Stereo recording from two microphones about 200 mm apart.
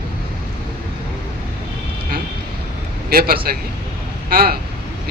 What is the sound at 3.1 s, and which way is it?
Speech, 50° right (ahead or behind).